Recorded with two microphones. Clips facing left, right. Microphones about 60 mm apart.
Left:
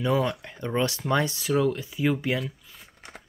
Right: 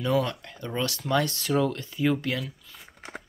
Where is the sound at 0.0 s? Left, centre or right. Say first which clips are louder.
Left 1 dB; centre.